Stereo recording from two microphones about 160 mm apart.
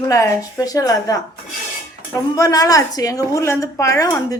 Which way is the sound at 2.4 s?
20° left (ahead or behind).